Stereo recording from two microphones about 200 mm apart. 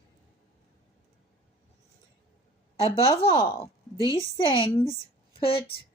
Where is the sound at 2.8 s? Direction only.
30° left (ahead or behind).